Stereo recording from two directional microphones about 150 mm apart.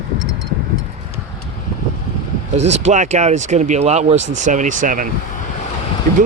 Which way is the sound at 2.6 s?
45° right (ahead or behind).